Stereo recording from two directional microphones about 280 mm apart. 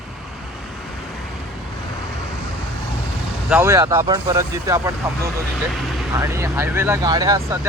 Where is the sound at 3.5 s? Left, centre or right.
Centre.